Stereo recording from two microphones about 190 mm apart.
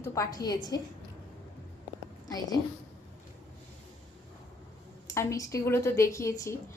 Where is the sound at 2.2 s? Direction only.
20° left (ahead or behind).